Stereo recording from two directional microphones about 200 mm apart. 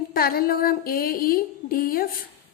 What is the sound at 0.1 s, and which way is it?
Speech, 50° left (ahead or behind).